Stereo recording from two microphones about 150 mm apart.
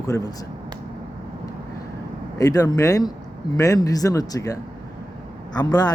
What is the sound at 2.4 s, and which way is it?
A man's voice, 25° left (ahead or behind).